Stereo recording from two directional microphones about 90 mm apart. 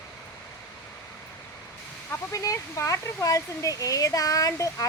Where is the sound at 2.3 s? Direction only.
35° left (ahead or behind).